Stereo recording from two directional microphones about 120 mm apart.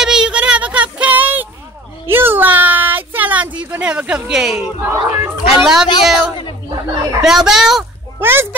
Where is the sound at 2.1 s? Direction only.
20° right (ahead or behind).